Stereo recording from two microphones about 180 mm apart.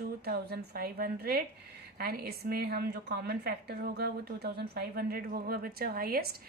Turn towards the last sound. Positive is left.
turn(degrees=-55)  # may be behind; listen again after turning